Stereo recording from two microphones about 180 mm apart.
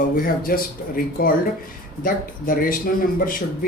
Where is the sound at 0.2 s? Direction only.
50° left (ahead or behind).